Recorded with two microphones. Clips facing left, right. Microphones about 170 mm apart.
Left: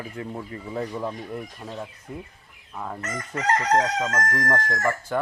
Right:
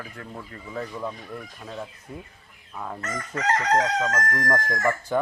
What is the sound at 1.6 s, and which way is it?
Chicken, centre (ahead or behind).